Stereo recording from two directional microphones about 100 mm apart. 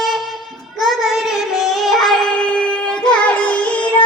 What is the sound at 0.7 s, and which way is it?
Child singing, centre (ahead or behind).